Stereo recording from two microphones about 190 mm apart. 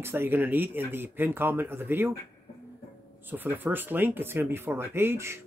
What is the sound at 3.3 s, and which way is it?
Speech, 10° right (ahead or behind).